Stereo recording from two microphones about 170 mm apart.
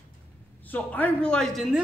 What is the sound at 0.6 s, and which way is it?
Speech, 10° left (ahead or behind).